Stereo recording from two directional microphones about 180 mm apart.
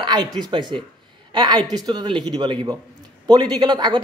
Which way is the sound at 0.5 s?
25° right (ahead or behind).